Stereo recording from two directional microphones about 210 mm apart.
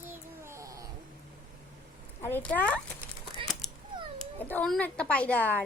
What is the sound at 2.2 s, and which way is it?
Speech, 10° left (ahead or behind).